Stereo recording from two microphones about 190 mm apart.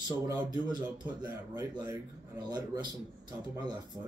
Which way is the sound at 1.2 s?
20° right (ahead or behind).